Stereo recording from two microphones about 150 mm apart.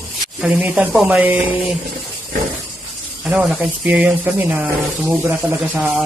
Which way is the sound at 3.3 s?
5° right (ahead or behind).